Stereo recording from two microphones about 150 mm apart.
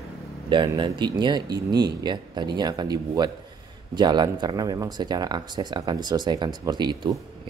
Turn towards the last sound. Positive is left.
turn(degrees=-30)  # may be behind; listen again after turning